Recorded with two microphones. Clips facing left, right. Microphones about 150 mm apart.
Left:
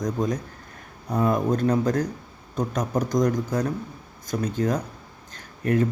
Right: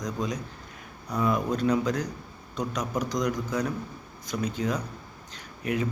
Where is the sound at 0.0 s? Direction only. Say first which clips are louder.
Left 5 dB; 50° left (ahead or behind).